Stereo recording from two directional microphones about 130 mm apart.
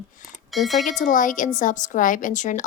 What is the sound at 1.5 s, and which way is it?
Speech, 75° left (ahead or behind).